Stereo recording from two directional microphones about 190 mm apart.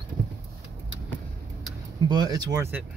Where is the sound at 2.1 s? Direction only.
20° right (ahead or behind).